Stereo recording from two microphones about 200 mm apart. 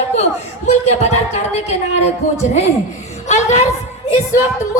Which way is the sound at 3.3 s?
35° left (ahead or behind).